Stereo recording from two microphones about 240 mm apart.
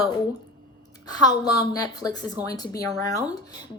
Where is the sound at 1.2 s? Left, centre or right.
Centre.